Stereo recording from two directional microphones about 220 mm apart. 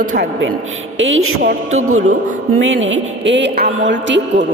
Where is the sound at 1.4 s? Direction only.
35° right (ahead or behind).